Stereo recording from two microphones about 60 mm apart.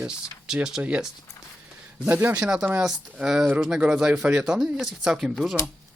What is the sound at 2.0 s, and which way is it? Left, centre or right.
Speech, right.